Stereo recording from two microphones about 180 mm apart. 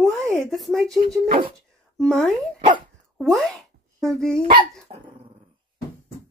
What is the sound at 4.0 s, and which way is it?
Speech, centre (ahead or behind).